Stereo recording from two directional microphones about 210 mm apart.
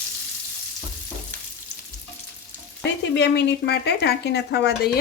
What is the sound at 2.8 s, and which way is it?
Speech, 55° left (ahead or behind).